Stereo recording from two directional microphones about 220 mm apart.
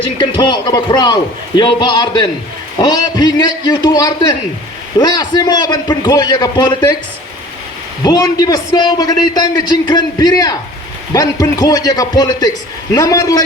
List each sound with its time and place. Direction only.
0.0 s a man's voice: 20° left (ahead or behind)
8.0 s a man's voice: 20° left (ahead or behind)